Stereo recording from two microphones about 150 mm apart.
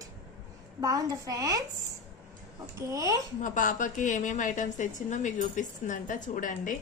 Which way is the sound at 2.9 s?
20° right (ahead or behind).